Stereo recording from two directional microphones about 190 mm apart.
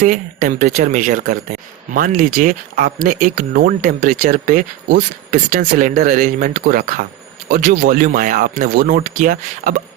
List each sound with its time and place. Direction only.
0.0 s speech: 45° right (ahead or behind)